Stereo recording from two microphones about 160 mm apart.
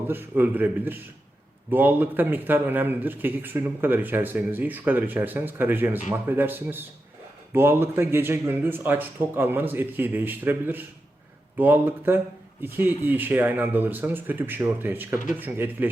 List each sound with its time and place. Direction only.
0.1 s speech: 10° right (ahead or behind)